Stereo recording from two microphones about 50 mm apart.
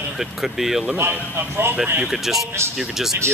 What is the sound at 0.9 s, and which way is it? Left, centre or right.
Speech, right.